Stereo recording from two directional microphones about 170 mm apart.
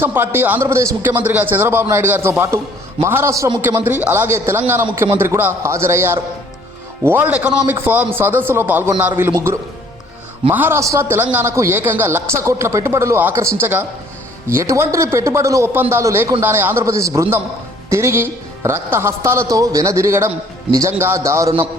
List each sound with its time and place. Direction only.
0.0 s a man's voice: 10° right (ahead or behind)
10.5 s a man's voice: 10° right (ahead or behind)